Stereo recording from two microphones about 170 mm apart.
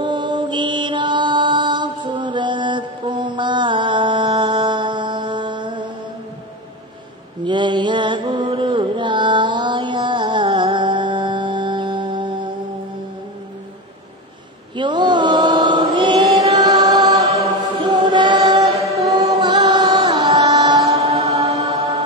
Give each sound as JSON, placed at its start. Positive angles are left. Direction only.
{"t": 0.0, "sound": "mantra", "side_deg": -25}
{"t": 7.4, "sound": "mantra", "side_deg": -25}
{"t": 14.8, "sound": "mantra", "side_deg": -25}
{"t": 16.3, "sound": "music", "side_deg": -35}
{"t": 16.6, "sound": "music", "side_deg": -25}
{"t": 17.7, "sound": "chant", "side_deg": -25}
{"t": 20.1, "sound": "music", "side_deg": -25}
{"t": 20.9, "sound": "mantra", "side_deg": -35}